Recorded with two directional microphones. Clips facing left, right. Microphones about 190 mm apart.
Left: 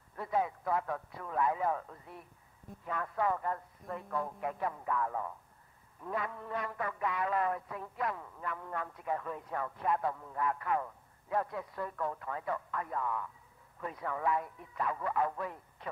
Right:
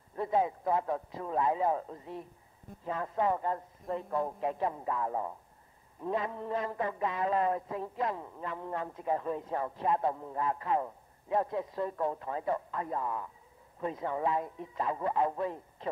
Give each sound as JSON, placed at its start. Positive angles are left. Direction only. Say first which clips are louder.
{"t": 0.1, "sound": "a man's voice", "louder": "right 4 dB", "side_deg": -25}